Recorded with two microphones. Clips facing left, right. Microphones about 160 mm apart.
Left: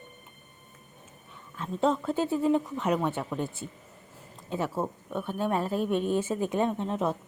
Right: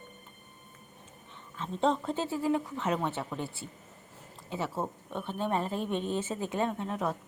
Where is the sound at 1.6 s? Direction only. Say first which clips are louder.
Left 2 dB; 5° left (ahead or behind).